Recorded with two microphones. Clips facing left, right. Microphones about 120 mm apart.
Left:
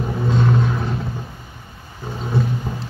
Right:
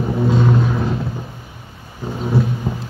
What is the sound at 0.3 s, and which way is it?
Vehicle, 5° right (ahead or behind).